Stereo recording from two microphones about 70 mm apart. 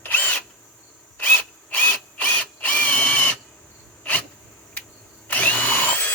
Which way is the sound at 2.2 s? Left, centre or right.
Left.